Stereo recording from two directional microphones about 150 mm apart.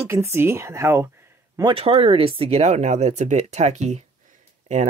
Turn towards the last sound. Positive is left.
turn(degrees=-50)  # may be behind; listen again after turning